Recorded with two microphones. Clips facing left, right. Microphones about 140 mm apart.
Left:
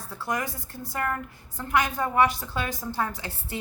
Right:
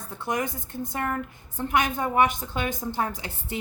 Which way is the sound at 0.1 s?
20° right (ahead or behind).